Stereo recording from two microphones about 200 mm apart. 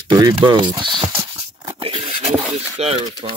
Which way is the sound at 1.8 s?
25° right (ahead or behind).